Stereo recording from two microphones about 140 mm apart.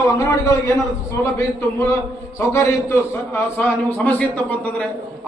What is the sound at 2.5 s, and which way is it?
A man's voice, 20° left (ahead or behind).